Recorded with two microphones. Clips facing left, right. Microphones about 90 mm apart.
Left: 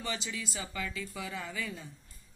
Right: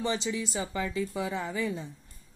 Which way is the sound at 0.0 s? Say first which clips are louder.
Right 8 dB; 25° right (ahead or behind).